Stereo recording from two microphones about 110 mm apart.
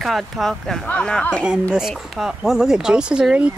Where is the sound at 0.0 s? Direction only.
Centre (ahead or behind).